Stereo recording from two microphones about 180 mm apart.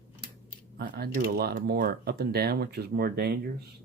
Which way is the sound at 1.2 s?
65° right (ahead or behind).